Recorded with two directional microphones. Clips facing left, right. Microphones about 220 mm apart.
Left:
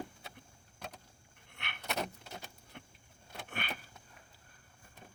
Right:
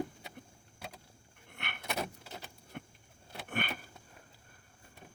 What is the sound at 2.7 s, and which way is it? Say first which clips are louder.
Vehicle: right 8 dB; 55° right (ahead or behind).